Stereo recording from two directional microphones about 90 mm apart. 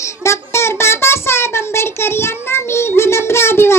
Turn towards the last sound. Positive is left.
turn(degrees=30)  # may be behind; listen again after turning